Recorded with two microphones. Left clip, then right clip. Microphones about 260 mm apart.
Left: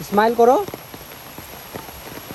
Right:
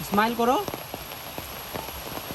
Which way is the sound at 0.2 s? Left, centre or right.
Centre.